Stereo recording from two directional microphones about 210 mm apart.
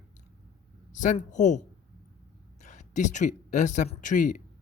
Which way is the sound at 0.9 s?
35° left (ahead or behind).